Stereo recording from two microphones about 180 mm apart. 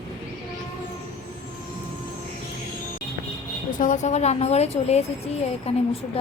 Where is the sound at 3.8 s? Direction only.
45° left (ahead or behind).